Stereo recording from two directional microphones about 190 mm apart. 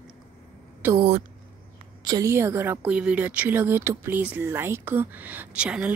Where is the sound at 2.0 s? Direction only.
15° right (ahead or behind).